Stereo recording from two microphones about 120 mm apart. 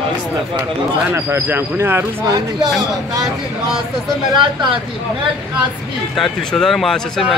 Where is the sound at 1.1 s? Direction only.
20° right (ahead or behind).